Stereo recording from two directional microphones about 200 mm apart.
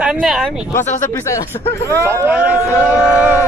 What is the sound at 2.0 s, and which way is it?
Speech, 15° right (ahead or behind).